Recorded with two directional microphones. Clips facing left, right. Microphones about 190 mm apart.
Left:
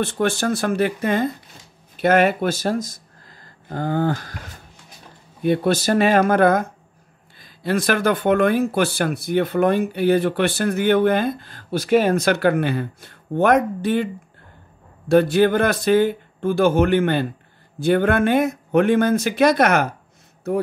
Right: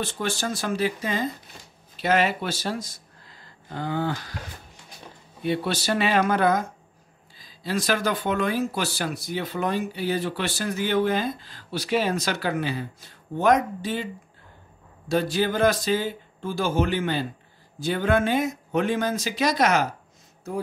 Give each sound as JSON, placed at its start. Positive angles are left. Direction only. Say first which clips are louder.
{"t": 0.0, "sound": "speech", "louder": "left 7 dB", "side_deg": 55}
{"t": 5.4, "sound": "speech", "louder": "left 7 dB", "side_deg": 50}
{"t": 15.0, "sound": "speech", "louder": "left 9 dB", "side_deg": 60}